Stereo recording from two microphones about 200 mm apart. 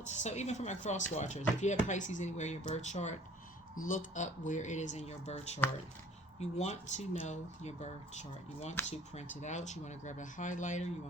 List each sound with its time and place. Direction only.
0.0 s speech: 35° left (ahead or behind)